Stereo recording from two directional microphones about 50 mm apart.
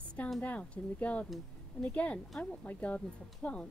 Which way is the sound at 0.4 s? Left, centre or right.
Left.